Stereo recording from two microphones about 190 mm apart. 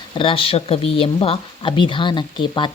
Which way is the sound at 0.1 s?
25° left (ahead or behind).